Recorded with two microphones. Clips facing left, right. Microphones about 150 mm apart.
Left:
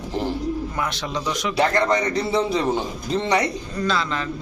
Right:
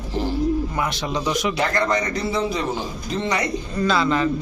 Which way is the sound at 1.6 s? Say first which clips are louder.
Left 2 dB; 30° left (ahead or behind).